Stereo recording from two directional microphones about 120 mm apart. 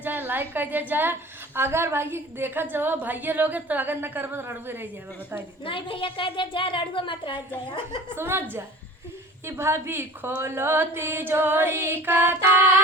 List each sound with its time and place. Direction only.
0.0 s a woman's voice: 15° right (ahead or behind)
5.6 s speech: 45° left (ahead or behind)
8.1 s a woman's voice: 20° right (ahead or behind)